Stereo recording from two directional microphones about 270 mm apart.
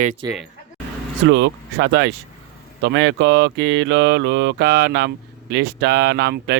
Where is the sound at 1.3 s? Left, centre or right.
Right.